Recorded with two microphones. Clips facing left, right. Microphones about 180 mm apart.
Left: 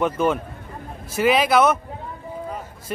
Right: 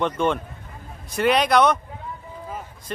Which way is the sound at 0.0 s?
5° left (ahead or behind).